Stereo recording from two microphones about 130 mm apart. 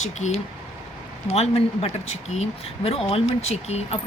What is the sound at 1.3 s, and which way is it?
Speech, 50° left (ahead or behind).